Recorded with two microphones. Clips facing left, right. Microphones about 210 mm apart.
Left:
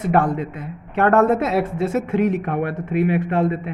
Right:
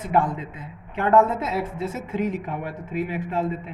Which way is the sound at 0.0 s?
70° left (ahead or behind).